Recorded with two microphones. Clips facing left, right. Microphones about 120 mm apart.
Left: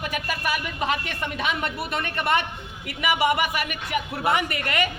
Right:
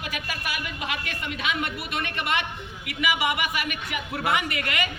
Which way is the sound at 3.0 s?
40° left (ahead or behind).